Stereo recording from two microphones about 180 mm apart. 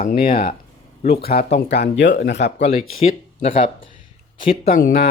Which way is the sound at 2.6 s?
35° left (ahead or behind).